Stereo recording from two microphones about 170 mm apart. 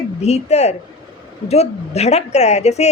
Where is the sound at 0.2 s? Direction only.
40° left (ahead or behind).